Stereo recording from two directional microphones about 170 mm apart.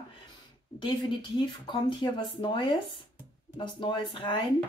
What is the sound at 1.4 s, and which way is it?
Speech, 30° left (ahead or behind).